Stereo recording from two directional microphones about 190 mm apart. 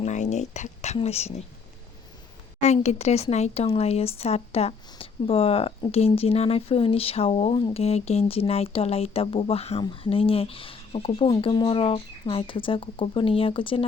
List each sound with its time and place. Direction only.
0.0 s speech: 40° left (ahead or behind)
2.8 s speech: 35° left (ahead or behind)